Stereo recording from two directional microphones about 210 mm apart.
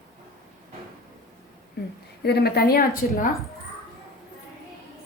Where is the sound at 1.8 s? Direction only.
50° left (ahead or behind).